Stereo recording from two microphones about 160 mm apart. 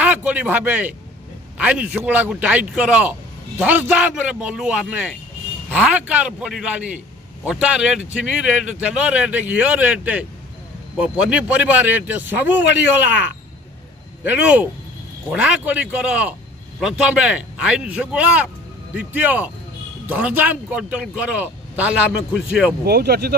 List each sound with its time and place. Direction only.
0.0 s a man's voice: 10° right (ahead or behind)
14.2 s a man's voice: 10° right (ahead or behind)
22.8 s speech: 80° right